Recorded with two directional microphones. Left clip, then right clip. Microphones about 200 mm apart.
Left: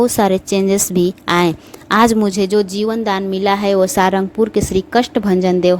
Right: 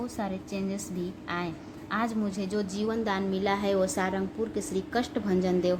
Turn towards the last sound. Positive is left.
turn(degrees=40)  # may be behind; listen again after turning